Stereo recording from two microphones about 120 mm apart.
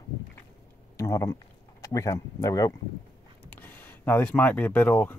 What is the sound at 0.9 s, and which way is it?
Speech, 25° left (ahead or behind).